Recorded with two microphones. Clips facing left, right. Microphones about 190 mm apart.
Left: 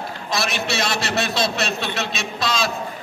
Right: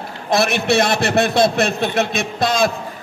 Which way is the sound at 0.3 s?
55° right (ahead or behind).